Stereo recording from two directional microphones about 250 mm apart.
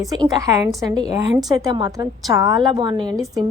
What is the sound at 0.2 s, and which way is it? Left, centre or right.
A woman's voice, centre.